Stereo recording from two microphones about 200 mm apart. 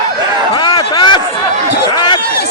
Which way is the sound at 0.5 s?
20° left (ahead or behind).